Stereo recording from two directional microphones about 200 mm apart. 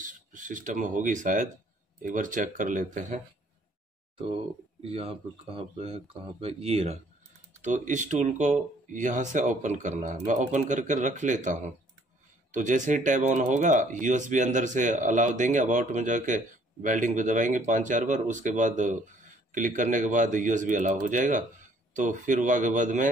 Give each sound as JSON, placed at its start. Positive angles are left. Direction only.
{"t": 0.0, "sound": "speech", "side_deg": -40}
{"t": 4.8, "sound": "speech", "side_deg": -30}